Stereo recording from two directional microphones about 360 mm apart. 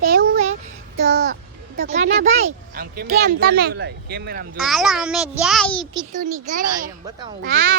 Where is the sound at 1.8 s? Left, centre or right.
Centre.